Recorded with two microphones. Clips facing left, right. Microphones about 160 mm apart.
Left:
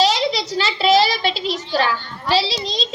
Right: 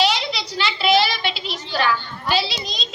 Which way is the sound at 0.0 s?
40° left (ahead or behind).